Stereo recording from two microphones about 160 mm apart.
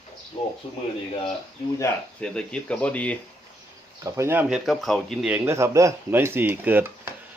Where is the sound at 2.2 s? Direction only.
5° left (ahead or behind).